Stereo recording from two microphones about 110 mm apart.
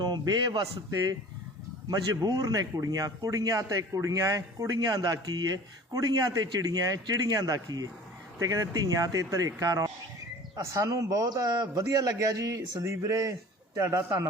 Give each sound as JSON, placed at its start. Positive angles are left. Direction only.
{"t": 0.0, "sound": "a man's voice", "side_deg": -40}
{"t": 1.9, "sound": "a man's voice", "side_deg": -35}